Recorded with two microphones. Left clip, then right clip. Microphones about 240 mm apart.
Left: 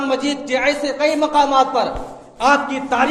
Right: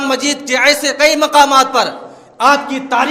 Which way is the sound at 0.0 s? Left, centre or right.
Right.